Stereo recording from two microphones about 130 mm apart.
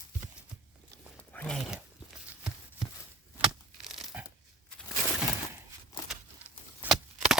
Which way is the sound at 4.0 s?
5° right (ahead or behind).